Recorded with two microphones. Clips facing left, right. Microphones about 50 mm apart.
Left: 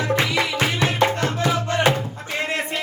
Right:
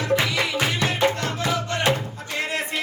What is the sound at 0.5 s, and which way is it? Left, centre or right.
Music, left.